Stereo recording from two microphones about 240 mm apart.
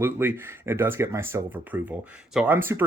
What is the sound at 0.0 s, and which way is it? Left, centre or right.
Speech, centre.